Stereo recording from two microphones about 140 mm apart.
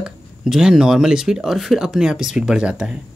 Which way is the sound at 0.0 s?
5° right (ahead or behind).